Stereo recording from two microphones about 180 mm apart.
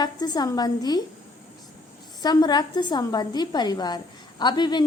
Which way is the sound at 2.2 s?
20° left (ahead or behind).